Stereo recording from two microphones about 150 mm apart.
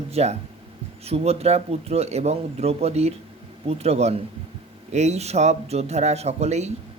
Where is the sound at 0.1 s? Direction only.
45° right (ahead or behind).